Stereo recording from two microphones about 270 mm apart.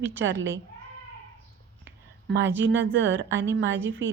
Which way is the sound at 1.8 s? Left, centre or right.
Right.